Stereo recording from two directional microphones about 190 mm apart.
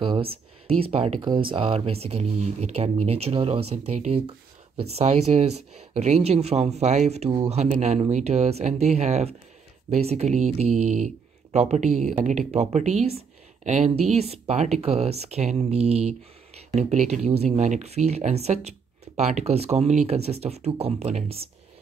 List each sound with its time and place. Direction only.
0.0 s speech: 30° right (ahead or behind)